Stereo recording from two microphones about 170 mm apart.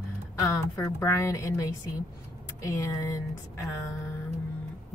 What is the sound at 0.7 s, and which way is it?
Speech, 15° left (ahead or behind).